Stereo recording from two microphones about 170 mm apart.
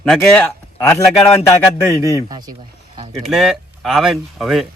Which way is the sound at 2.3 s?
25° right (ahead or behind).